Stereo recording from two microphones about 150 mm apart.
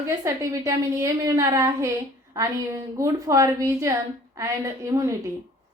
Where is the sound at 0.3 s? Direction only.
20° right (ahead or behind).